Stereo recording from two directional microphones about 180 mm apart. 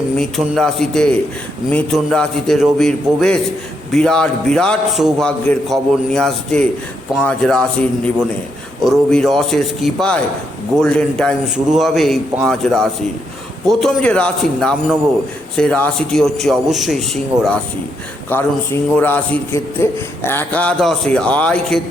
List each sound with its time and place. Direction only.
0.2 s a man's voice: centre (ahead or behind)
17.3 s speech: 20° right (ahead or behind)
18.3 s a man's voice: 10° left (ahead or behind)